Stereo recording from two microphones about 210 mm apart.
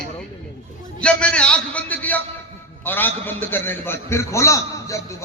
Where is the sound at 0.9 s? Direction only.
5° left (ahead or behind).